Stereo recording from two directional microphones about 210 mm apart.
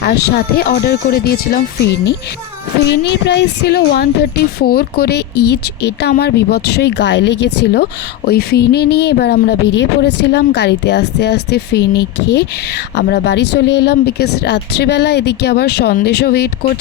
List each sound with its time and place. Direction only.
0.0 s speech: 50° left (ahead or behind)
2.8 s speech: 55° left (ahead or behind)